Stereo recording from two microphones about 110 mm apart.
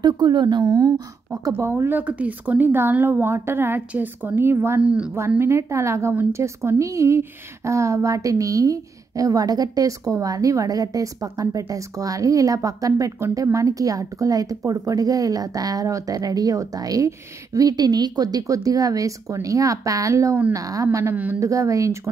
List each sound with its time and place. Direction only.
0.0 s a woman's voice: 40° right (ahead or behind)
1.5 s a woman's voice: 20° right (ahead or behind)
5.4 s a woman's voice: 25° right (ahead or behind)
21.4 s a woman's voice: 30° right (ahead or behind)